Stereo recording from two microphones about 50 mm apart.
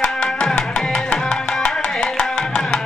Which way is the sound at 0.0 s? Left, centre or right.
Centre.